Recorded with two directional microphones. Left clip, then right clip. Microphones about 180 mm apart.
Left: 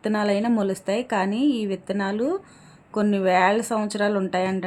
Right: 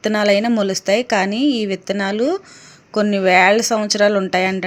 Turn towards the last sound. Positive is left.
turn(degrees=-15)  # may be behind; listen again after turning